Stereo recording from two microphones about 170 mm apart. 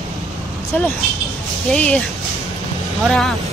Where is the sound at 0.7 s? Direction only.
10° left (ahead or behind).